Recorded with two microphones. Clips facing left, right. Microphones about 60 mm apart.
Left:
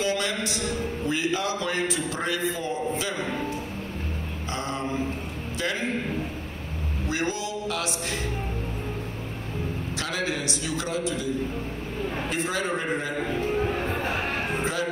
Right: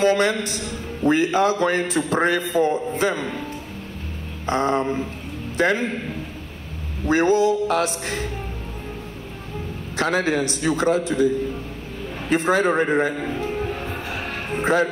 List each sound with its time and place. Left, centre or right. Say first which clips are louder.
0.0 s a man's voice: right 8 dB; right
4.5 s a man's voice: right 10 dB; right
7.1 s a man's voice: right 12 dB; right
9.9 s a man's voice: right 10 dB; right
13.4 s music: even; left
14.6 s speech: right 13 dB; right